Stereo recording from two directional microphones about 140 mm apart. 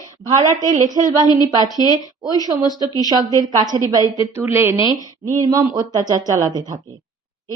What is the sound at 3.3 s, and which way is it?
A woman's voice, 30° right (ahead or behind).